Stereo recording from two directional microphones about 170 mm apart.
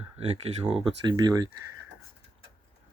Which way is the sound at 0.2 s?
35° right (ahead or behind).